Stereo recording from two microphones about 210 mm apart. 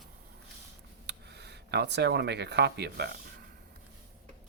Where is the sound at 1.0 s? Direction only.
55° right (ahead or behind).